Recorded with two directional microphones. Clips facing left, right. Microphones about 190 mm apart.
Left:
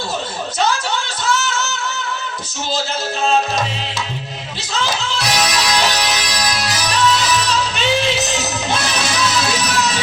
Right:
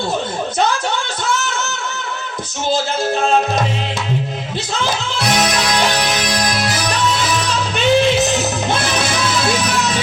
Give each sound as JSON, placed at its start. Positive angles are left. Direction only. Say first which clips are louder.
{"t": 4.7, "sound": "music", "louder": "left 1 dB", "side_deg": -50}